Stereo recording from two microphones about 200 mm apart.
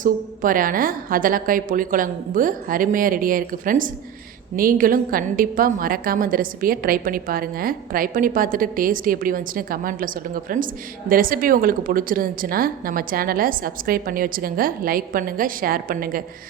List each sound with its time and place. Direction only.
0.0 s a woman's voice: 45° right (ahead or behind)